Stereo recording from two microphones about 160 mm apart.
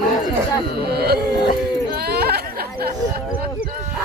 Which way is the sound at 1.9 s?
80° right.